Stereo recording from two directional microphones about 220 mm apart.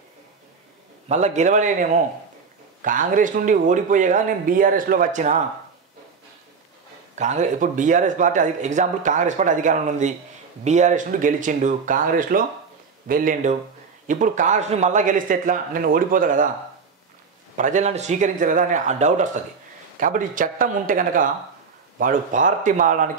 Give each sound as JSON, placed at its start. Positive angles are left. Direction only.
{"t": 1.0, "sound": "speech", "side_deg": -30}
{"t": 7.2, "sound": "speech", "side_deg": -35}
{"t": 17.6, "sound": "speech", "side_deg": -35}